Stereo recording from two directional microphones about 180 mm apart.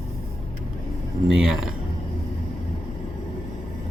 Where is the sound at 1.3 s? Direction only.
Centre (ahead or behind).